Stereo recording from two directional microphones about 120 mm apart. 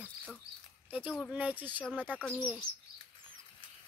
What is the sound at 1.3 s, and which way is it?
Speech, 10° right (ahead or behind).